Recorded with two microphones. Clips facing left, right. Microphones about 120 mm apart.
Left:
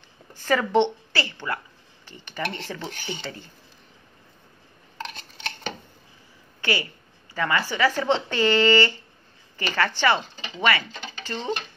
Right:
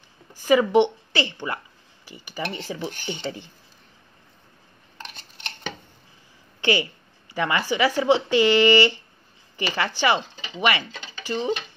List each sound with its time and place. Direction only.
0.3 s a woman's voice: 10° right (ahead or behind)
6.6 s a woman's voice: 20° right (ahead or behind)